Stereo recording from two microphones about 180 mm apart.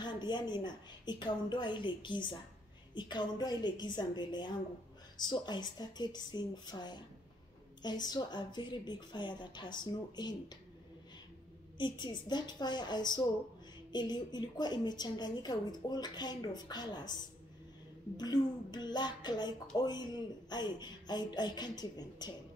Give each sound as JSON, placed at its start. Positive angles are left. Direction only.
{"t": 0.0, "sound": "a woman's voice", "side_deg": 25}
{"t": 11.8, "sound": "a woman's voice", "side_deg": 25}